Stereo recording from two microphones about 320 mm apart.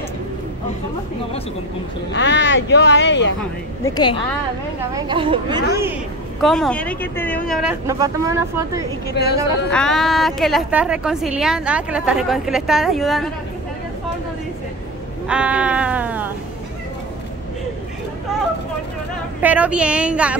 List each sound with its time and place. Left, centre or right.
2.1 s speech: left
3.3 s speech: centre
4.9 s speech: centre
6.4 s a woman's voice: centre
9.7 s a woman's voice: centre
15.2 s a woman's voice: centre
19.4 s a woman's voice: centre